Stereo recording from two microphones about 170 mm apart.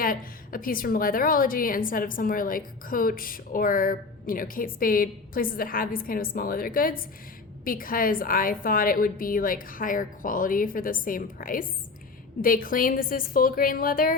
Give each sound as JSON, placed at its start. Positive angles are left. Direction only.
{"t": 0.0, "sound": "a woman's voice", "side_deg": 55}